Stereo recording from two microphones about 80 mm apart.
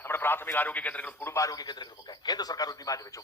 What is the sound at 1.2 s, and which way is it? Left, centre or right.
Speech, left.